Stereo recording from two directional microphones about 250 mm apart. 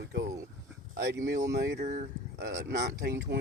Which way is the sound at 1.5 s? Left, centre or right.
Right.